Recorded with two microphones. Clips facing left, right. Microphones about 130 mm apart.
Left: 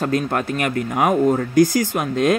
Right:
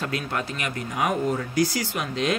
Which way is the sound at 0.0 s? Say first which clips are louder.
Left 8 dB; 45° left (ahead or behind).